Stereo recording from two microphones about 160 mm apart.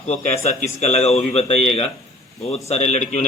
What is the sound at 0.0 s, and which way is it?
Speech, 40° left (ahead or behind).